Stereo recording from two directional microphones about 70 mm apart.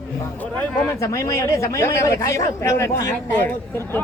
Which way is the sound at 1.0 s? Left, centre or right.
Left.